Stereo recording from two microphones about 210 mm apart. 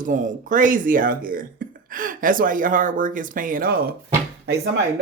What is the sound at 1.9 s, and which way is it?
Speech, 40° right (ahead or behind).